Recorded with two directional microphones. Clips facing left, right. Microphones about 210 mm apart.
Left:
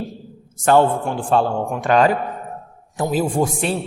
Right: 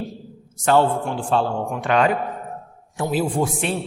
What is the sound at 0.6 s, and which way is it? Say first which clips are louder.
A man's voice: left 2 dB; 50° left (ahead or behind).